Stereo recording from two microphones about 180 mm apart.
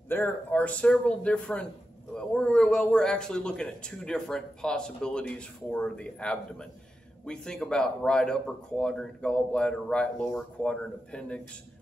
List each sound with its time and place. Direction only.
0.1 s a man's voice: 10° left (ahead or behind)